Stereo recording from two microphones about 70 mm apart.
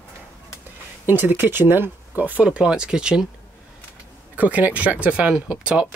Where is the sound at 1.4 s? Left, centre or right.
Right; by 3.3 s centre.